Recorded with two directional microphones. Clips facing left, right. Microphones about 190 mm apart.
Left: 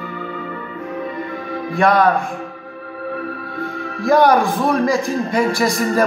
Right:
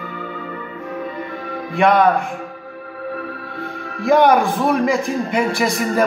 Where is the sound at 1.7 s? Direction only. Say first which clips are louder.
Right 1 dB; 15° right (ahead or behind).